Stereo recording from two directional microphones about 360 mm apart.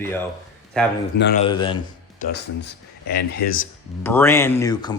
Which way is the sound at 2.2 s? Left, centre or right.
Left.